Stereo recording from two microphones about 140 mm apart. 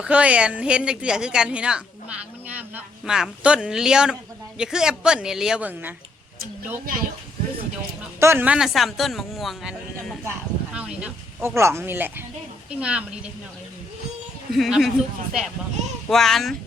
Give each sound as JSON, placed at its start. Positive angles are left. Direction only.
{"t": 0.0, "sound": "a woman's voice", "side_deg": -10}
{"t": 8.2, "sound": "speech", "side_deg": -15}
{"t": 10.2, "sound": "a sound", "side_deg": -5}
{"t": 11.4, "sound": "speech", "side_deg": -20}
{"t": 14.5, "sound": "speech", "side_deg": 0}